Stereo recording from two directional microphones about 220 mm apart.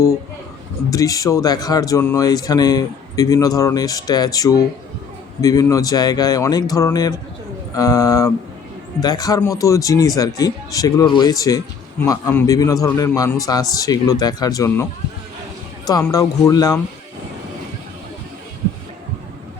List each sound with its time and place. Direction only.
0.9 s speech: 15° left (ahead or behind)
15.9 s speech: 15° left (ahead or behind)